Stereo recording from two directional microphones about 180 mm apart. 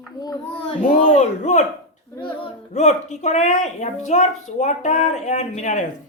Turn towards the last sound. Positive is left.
turn(degrees=40)  # may be behind; listen again after turning